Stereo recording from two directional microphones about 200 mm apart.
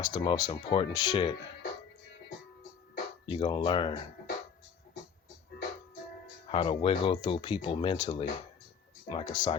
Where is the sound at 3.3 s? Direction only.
25° left (ahead or behind).